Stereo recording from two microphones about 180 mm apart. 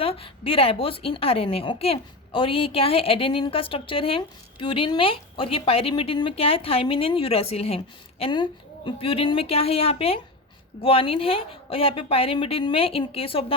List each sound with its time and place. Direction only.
0.0 s a woman's voice: 30° left (ahead or behind)